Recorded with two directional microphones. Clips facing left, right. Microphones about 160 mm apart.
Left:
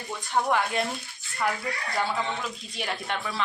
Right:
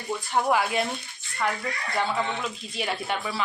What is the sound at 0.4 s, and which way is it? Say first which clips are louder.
Speech: right 3 dB; 5° right (ahead or behind).